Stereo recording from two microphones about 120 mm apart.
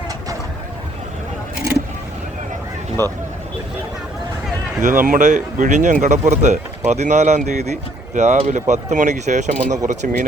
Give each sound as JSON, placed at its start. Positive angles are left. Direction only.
{"t": 4.8, "sound": "speech", "side_deg": -90}